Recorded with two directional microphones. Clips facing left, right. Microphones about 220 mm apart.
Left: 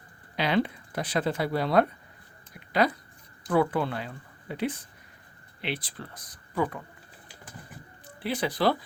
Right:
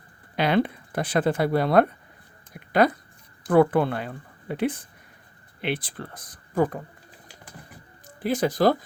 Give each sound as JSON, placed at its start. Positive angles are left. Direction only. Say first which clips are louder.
{"t": 0.3, "sound": "speech", "louder": "right 4 dB", "side_deg": -50}
{"t": 8.0, "sound": "speech", "louder": "right 6 dB", "side_deg": -45}